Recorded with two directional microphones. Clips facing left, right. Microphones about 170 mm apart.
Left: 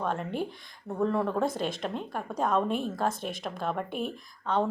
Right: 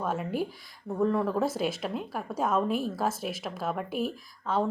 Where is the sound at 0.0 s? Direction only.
5° right (ahead or behind).